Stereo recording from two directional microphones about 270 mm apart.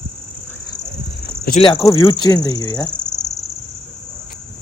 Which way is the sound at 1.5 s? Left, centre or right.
Left.